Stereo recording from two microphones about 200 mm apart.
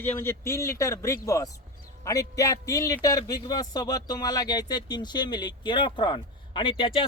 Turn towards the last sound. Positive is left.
turn(degrees=25)  # may be behind; listen again after turning